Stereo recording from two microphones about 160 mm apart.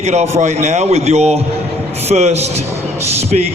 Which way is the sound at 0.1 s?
45° right (ahead or behind).